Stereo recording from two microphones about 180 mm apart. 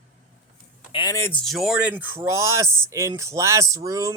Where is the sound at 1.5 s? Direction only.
Centre (ahead or behind).